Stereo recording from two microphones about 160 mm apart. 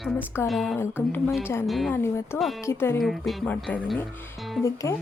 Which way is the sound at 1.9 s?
15° left (ahead or behind).